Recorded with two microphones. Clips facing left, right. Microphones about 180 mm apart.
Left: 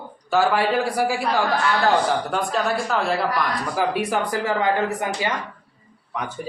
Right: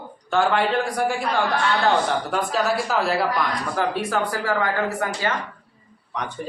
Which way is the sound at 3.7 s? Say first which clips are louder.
Left 2 dB; 15° left (ahead or behind).